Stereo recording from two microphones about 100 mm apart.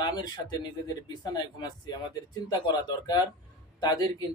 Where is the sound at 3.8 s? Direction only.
45° left (ahead or behind).